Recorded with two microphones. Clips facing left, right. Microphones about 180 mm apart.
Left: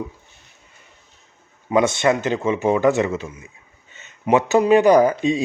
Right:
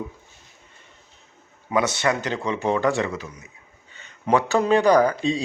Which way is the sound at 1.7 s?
25° left (ahead or behind).